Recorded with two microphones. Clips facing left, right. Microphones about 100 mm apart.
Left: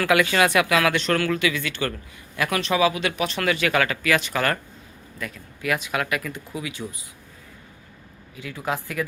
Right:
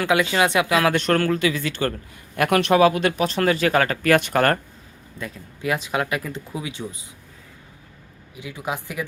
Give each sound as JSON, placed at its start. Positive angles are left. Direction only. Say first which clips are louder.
{"t": 0.0, "sound": "speech", "louder": "even", "side_deg": -25}
{"t": 0.9, "sound": "speech", "louder": "right 3 dB", "side_deg": -45}
{"t": 2.3, "sound": "speech", "louder": "right 6 dB", "side_deg": -55}
{"t": 5.2, "sound": "speech", "louder": "right 2 dB", "side_deg": -25}
{"t": 8.4, "sound": "speech", "louder": "left 1 dB", "side_deg": -15}